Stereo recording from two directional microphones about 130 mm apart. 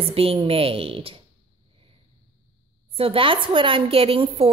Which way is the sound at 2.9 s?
45° right (ahead or behind).